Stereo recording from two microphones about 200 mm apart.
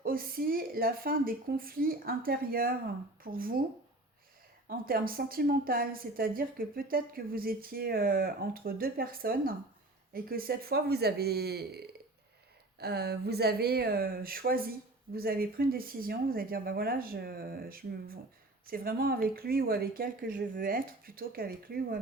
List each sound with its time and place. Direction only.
0.0 s a woman's voice: 45° right (ahead or behind)
4.9 s a woman's voice: 50° right (ahead or behind)